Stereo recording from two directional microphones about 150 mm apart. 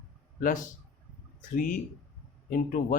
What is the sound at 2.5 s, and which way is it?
Speech, 65° left (ahead or behind).